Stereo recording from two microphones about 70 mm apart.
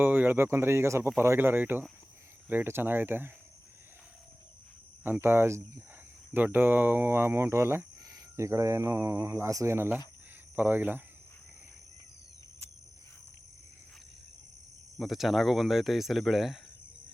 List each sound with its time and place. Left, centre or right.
0.0 s speech: right
5.2 s speech: right
6.3 s speech: right
10.5 s speech: right
14.9 s speech: centre